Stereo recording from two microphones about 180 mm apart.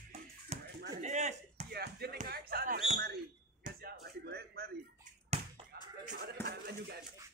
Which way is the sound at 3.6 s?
60° right (ahead or behind).